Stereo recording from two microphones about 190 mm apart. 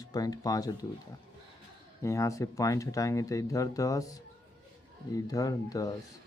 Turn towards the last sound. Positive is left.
turn(degrees=20)  # may be behind; listen again after turning